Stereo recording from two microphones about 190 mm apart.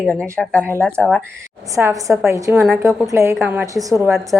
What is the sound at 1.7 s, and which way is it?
A woman's voice, 15° right (ahead or behind).